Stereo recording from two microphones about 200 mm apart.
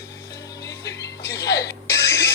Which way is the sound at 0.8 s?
15° left (ahead or behind).